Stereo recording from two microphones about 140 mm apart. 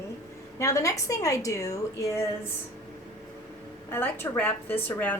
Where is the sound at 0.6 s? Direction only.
25° left (ahead or behind).